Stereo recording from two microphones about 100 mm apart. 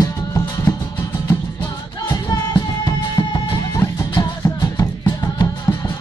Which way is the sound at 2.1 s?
40° left (ahead or behind).